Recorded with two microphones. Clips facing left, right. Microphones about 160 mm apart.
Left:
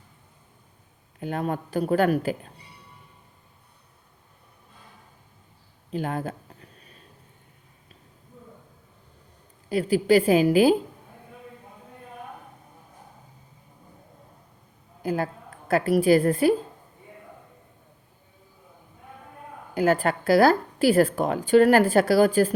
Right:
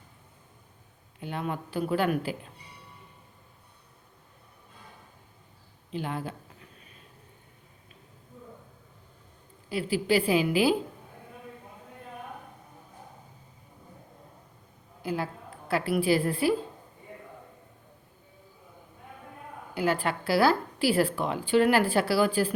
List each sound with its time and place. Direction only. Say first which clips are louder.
1.2 s a woman's voice: left 5 dB; 45° left (ahead or behind)
5.9 s a woman's voice: left 5 dB; 45° left (ahead or behind)
9.6 s a woman's voice: left 6 dB; 45° left (ahead or behind)
15.0 s a woman's voice: left 5 dB; 45° left (ahead or behind)
19.7 s a woman's voice: left 6 dB; 45° left (ahead or behind)